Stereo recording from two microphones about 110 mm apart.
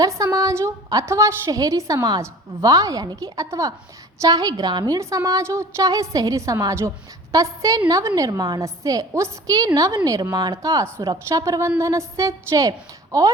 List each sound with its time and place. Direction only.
0.0 s a woman's voice: 30° right (ahead or behind)
4.9 s a woman's voice: 30° right (ahead or behind)